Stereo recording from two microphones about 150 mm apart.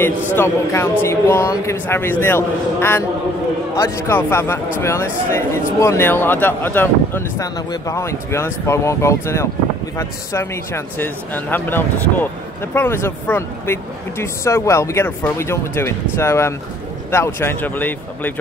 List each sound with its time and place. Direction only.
0.4 s speech: 20° left (ahead or behind)